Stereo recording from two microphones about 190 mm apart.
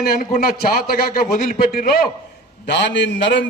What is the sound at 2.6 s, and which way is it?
Speech, 65° left (ahead or behind).